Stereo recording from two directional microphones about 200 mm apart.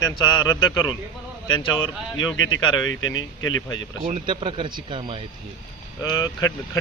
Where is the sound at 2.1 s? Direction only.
80° left.